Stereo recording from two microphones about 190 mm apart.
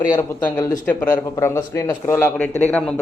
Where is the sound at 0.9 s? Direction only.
10° left (ahead or behind).